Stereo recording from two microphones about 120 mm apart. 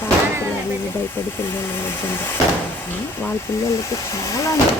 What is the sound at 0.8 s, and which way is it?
A woman's voice, 15° left (ahead or behind).